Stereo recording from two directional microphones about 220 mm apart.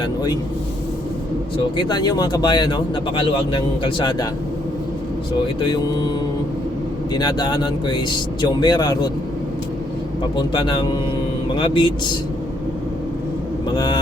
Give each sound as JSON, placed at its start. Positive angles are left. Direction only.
{"t": 0.0, "sound": "speech", "side_deg": 20}
{"t": 1.7, "sound": "speech", "side_deg": 20}
{"t": 5.5, "sound": "speech", "side_deg": 20}
{"t": 7.1, "sound": "speech", "side_deg": 20}
{"t": 10.5, "sound": "speech", "side_deg": 20}
{"t": 13.7, "sound": "speech", "side_deg": 20}